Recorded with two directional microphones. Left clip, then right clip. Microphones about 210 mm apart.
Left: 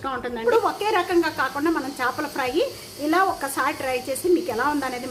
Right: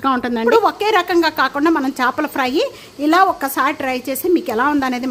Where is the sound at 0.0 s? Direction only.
55° right (ahead or behind).